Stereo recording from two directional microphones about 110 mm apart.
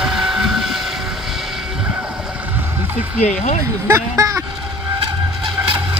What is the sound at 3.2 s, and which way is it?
Speech, 90° left.